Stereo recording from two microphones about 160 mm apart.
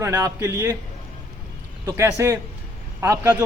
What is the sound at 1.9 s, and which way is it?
A man's voice, 15° right (ahead or behind).